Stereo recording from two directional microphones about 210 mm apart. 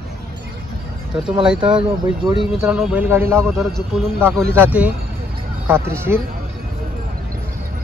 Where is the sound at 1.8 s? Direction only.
20° right (ahead or behind).